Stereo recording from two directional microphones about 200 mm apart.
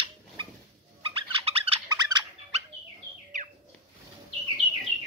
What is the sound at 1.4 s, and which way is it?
Squeak, 30° right (ahead or behind).